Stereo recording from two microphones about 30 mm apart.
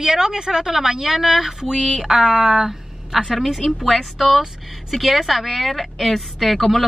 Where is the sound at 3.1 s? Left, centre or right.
Centre.